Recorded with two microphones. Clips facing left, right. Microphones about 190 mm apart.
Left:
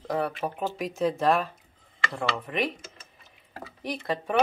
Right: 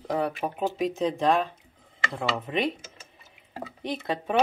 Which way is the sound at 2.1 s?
25° right (ahead or behind).